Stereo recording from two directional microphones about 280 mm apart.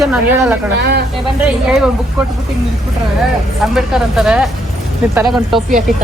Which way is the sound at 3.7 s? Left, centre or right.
Centre.